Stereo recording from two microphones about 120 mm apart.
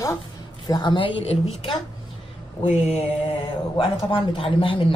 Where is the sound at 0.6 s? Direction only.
40° left (ahead or behind).